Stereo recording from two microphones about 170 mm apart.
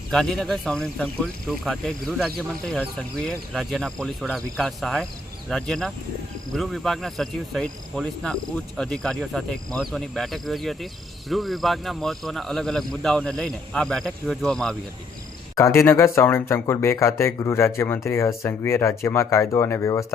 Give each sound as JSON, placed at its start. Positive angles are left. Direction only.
{"t": 0.1, "sound": "speech", "side_deg": 5}
{"t": 15.5, "sound": "speech", "side_deg": 15}